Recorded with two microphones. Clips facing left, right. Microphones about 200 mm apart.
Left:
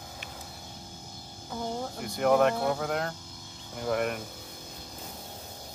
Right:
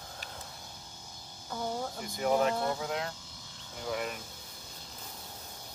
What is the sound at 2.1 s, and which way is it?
Speech, 65° left (ahead or behind).